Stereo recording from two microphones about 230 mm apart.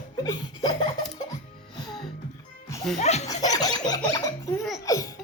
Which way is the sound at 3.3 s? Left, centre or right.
Centre.